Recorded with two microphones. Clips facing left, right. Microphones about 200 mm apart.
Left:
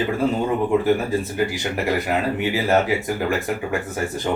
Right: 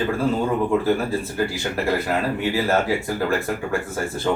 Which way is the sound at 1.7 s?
15° left (ahead or behind).